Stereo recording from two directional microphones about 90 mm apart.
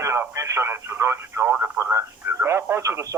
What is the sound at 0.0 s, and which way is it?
Speech, 30° right (ahead or behind).